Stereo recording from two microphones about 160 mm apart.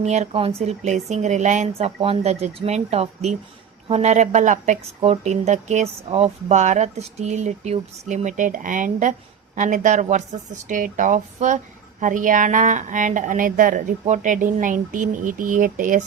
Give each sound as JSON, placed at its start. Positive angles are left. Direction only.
{"t": 0.0, "sound": "speech", "side_deg": -45}